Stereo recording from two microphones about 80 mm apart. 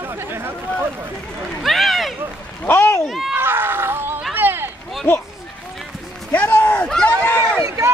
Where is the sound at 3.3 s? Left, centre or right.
Right.